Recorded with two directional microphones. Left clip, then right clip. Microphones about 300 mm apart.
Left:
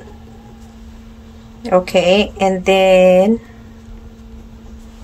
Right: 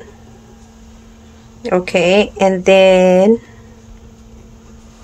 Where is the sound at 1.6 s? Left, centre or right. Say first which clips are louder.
Left 1 dB; centre.